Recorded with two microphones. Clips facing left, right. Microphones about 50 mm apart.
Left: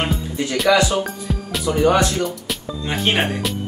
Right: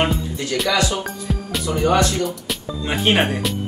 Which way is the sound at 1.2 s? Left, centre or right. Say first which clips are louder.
Left 1 dB; centre.